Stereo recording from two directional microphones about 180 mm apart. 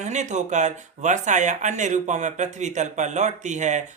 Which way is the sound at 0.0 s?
40° right (ahead or behind).